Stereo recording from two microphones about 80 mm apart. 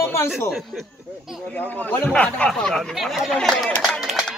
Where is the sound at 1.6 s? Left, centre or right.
Left.